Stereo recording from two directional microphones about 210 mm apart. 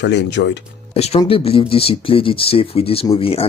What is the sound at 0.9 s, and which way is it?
Speech, 30° left (ahead or behind).